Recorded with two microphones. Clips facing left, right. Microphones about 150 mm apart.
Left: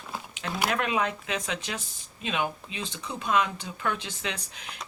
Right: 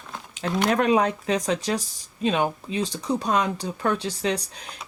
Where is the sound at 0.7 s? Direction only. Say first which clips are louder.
Right 9 dB; 40° right (ahead or behind).